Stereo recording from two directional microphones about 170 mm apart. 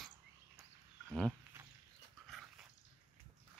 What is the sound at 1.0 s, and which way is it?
Wild animals, 5° left (ahead or behind).